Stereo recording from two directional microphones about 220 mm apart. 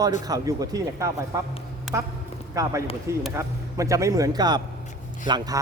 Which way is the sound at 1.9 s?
Centre (ahead or behind).